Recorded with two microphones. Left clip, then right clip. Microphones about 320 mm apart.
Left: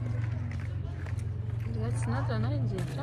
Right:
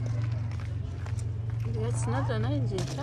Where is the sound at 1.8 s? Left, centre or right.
Centre.